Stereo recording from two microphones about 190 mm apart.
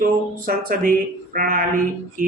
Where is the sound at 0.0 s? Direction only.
50° right (ahead or behind).